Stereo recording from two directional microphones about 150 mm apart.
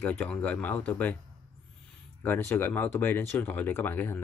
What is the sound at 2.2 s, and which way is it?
Speech, 15° left (ahead or behind).